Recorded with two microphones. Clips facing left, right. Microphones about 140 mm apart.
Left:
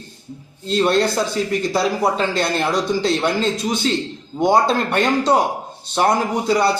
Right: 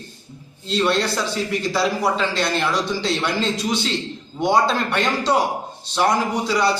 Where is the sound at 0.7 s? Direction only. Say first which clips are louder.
Left 3 dB; 45° left (ahead or behind).